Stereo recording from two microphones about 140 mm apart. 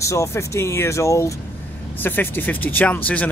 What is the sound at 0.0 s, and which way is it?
Speech, 20° left (ahead or behind).